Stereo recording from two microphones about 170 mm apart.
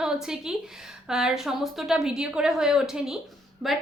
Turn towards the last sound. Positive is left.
turn(degrees=0)  # may be behind; listen again after turning